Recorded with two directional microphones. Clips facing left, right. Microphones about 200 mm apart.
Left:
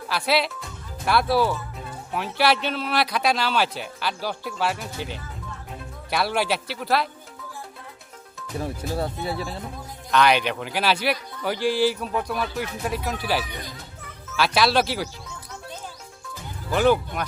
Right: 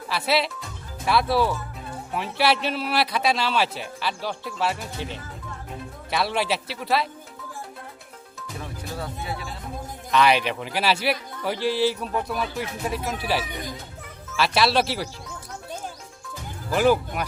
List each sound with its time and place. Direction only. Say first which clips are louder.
0.1 s a man's voice: even; centre (ahead or behind)
8.5 s speech: left 7 dB; 35° left (ahead or behind)
10.1 s a man's voice: even; centre (ahead or behind)
16.7 s a man's voice: even; 5° right (ahead or behind)